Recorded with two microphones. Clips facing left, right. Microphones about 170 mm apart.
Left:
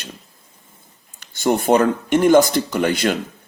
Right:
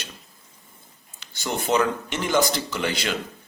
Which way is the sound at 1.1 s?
50° left (ahead or behind).